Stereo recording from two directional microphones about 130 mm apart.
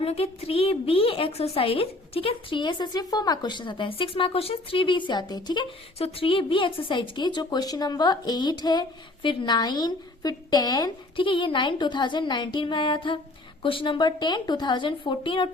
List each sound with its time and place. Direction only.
0.0 s a woman's voice: 50° left (ahead or behind); by 5.6 s 35° left (ahead or behind)
6.0 s a woman's voice: 50° left (ahead or behind)